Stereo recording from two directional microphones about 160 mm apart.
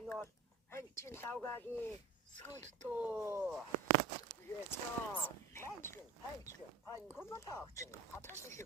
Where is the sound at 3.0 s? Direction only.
10° right (ahead or behind).